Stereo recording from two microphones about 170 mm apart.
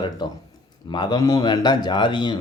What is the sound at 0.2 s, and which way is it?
Speech, 25° left (ahead or behind).